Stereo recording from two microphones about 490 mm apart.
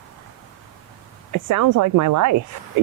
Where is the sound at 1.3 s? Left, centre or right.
Right.